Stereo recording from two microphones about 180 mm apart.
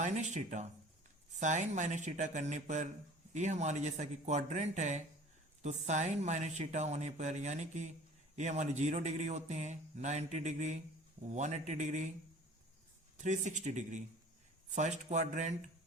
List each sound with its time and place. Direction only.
0.0 s a man's voice: 40° right (ahead or behind)
13.1 s a man's voice: 40° right (ahead or behind)